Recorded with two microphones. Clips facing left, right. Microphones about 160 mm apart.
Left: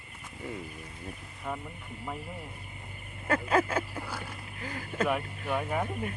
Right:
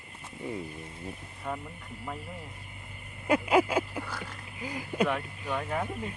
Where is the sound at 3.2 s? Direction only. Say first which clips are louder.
Right 3 dB; 15° right (ahead or behind).